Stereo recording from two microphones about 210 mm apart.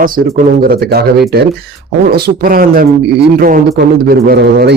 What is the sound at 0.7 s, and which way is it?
A man's voice, 50° right (ahead or behind).